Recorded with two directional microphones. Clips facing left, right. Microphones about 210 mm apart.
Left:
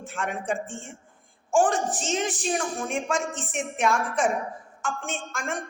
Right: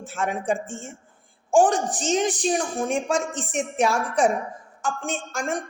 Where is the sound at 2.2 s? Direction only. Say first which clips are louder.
Right 5 dB; 35° right (ahead or behind).